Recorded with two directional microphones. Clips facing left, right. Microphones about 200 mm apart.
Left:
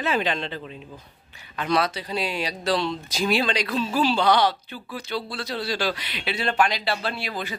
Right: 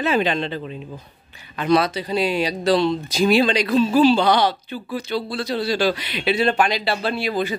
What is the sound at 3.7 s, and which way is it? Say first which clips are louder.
Speech: right 11 dB; 20° right (ahead or behind).